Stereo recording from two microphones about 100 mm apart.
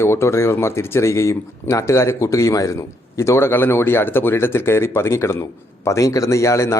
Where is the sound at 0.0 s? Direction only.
25° left (ahead or behind).